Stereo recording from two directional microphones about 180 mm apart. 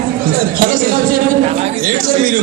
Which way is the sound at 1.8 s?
50° right (ahead or behind).